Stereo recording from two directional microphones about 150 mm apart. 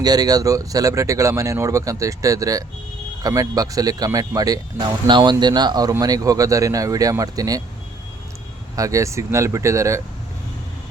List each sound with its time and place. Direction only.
0.0 s speech: 25° right (ahead or behind)
8.7 s speech: 20° right (ahead or behind)